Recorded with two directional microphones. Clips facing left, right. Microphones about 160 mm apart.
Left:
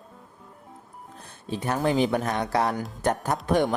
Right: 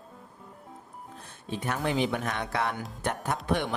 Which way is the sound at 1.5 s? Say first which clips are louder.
Left 5 dB; 35° left (ahead or behind).